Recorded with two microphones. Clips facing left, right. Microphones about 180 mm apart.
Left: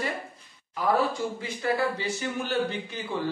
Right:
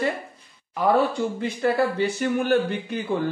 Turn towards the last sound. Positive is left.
turn(degrees=-55)  # may be behind; listen again after turning